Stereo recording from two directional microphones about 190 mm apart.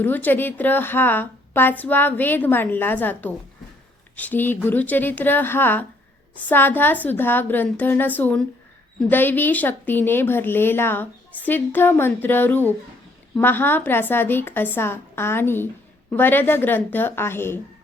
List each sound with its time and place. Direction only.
0.0 s a woman's voice: 10° left (ahead or behind)